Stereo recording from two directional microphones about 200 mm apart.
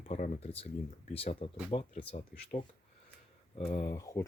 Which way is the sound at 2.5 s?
40° left (ahead or behind).